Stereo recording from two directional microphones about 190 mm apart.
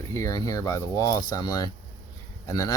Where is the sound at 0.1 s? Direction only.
15° left (ahead or behind).